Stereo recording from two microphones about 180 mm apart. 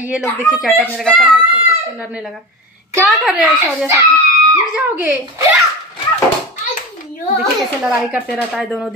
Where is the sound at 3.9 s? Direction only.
15° right (ahead or behind).